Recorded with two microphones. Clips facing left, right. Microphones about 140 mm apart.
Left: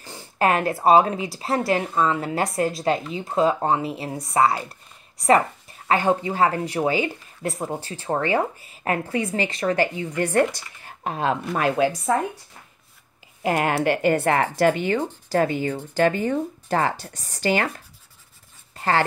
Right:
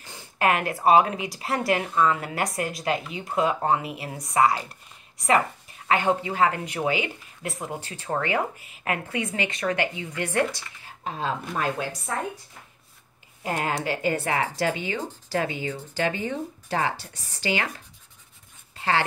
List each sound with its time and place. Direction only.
0.0 s speech: 35° left (ahead or behind); by 11.9 s 75° left (ahead or behind)
13.4 s speech: 70° left (ahead or behind)
13.8 s speech: 60° left (ahead or behind); by 19.0 s 45° left (ahead or behind)